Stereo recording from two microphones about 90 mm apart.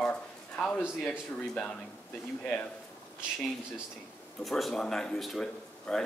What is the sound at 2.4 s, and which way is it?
Speech, 15° left (ahead or behind).